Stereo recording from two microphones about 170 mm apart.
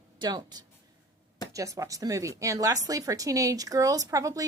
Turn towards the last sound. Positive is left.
turn(degrees=-20)  # may be behind; listen again after turning